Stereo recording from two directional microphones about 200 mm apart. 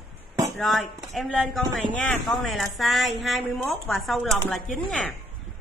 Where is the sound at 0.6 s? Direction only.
Centre (ahead or behind).